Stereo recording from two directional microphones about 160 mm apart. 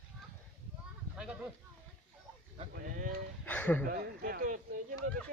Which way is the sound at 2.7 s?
60° right (ahead or behind).